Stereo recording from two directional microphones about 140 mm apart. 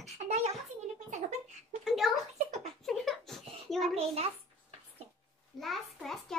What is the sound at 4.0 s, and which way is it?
Speech, 45° right (ahead or behind).